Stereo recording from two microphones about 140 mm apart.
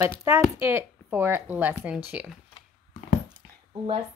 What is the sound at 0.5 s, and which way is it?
Speech, 15° right (ahead or behind).